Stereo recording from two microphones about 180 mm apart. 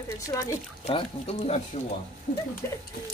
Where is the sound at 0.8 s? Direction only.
35° left (ahead or behind).